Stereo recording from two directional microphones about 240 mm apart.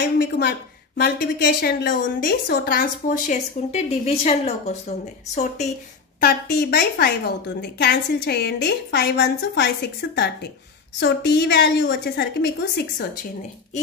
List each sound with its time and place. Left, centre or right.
0.2 s a woman's voice: left
6.2 s a woman's voice: left